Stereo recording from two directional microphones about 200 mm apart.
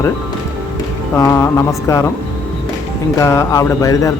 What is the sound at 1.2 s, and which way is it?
Speech, 15° left (ahead or behind).